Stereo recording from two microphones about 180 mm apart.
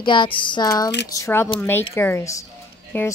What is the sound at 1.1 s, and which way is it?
A woman's voice, 15° left (ahead or behind).